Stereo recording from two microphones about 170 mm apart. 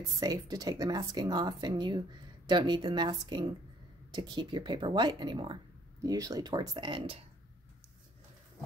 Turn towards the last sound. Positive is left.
turn(degrees=-30)  # may be behind; listen again after turning